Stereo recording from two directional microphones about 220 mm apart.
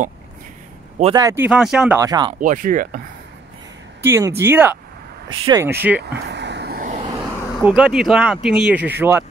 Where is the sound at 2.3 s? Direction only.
35° right (ahead or behind).